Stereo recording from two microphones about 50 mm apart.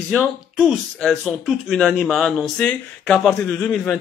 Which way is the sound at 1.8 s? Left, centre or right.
Centre.